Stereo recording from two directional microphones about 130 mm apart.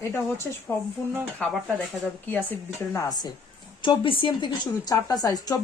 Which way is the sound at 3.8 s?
40° left (ahead or behind).